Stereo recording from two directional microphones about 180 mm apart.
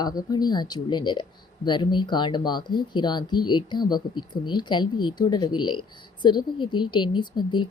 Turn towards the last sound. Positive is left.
turn(degrees=25)  # may be behind; listen again after turning